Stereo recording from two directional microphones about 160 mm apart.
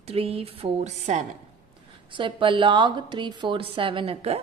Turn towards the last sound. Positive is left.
turn(degrees=-40)  # may be behind; listen again after turning